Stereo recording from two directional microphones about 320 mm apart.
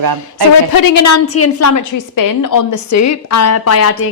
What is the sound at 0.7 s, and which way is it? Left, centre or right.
A woman's voice, left.